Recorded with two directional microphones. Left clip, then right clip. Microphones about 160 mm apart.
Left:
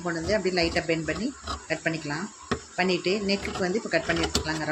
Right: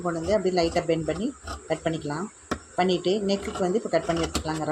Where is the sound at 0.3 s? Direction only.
15° right (ahead or behind).